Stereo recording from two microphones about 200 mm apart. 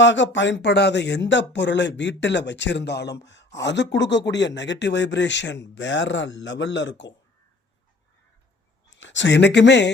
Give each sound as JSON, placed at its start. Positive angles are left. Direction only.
{"t": 0.0, "sound": "speech", "side_deg": 65}
{"t": 8.9, "sound": "speech", "side_deg": 65}